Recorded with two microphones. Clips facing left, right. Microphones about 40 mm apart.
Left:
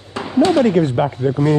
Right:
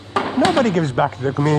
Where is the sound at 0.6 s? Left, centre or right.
Centre.